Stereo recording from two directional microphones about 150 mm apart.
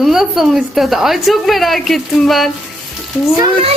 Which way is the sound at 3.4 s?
35° right (ahead or behind).